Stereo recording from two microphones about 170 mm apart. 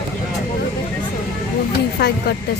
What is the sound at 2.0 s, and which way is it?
Speech, 65° left (ahead or behind).